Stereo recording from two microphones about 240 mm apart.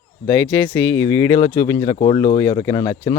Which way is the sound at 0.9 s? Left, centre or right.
Centre.